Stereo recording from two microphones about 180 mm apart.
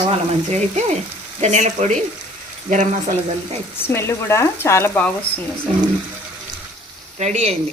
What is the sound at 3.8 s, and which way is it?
Speech, 15° left (ahead or behind).